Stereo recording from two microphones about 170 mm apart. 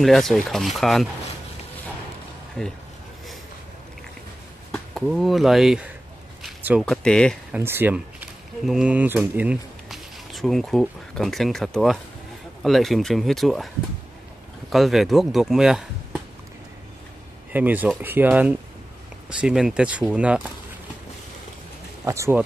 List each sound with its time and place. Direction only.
0.0 s speech: centre (ahead or behind)
2.6 s speech: 5° left (ahead or behind)
4.7 s speech: centre (ahead or behind)
7.5 s speech: 15° right (ahead or behind)
14.7 s speech: centre (ahead or behind)
17.5 s speech: 10° right (ahead or behind)
22.0 s speech: 15° right (ahead or behind)